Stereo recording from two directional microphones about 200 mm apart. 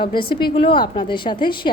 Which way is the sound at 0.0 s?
25° left (ahead or behind).